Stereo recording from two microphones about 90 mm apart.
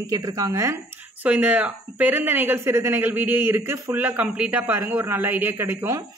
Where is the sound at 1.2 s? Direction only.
15° right (ahead or behind).